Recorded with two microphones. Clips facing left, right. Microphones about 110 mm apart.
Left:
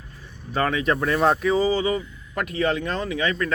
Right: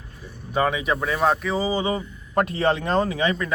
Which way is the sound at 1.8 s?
30° right (ahead or behind).